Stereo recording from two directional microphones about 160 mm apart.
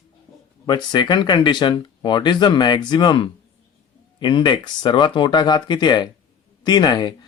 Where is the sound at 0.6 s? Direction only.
30° left (ahead or behind).